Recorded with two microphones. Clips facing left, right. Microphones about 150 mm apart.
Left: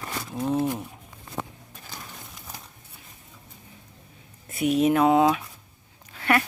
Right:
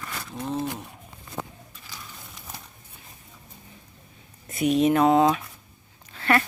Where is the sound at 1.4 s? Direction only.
55° left (ahead or behind).